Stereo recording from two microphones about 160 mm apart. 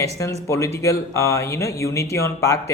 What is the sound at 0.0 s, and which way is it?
Speech, 20° left (ahead or behind).